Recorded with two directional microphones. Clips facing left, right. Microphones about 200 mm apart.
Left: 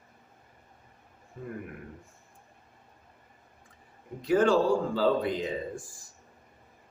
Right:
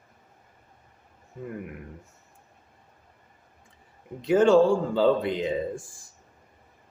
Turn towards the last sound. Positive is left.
turn(degrees=-25)  # may be behind; listen again after turning